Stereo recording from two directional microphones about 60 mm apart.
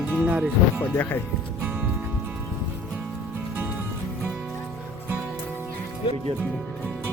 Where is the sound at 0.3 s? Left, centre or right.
Right.